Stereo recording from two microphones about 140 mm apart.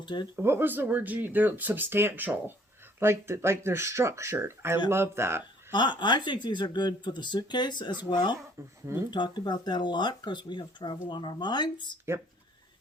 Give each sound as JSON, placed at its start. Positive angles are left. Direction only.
{"t": 0.0, "sound": "speech", "side_deg": 35}
{"t": 0.3, "sound": "speech", "side_deg": -15}
{"t": 5.7, "sound": "speech", "side_deg": 35}
{"t": 8.6, "sound": "speech", "side_deg": -20}
{"t": 9.0, "sound": "speech", "side_deg": 35}